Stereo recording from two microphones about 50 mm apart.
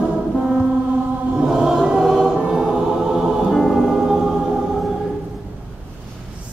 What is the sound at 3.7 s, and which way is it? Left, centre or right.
Choir, centre.